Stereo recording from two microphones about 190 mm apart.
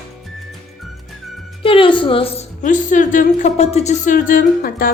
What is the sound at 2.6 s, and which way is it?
Speech, 40° left (ahead or behind).